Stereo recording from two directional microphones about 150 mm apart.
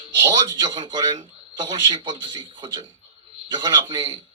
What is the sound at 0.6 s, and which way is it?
A man's voice, 30° right (ahead or behind).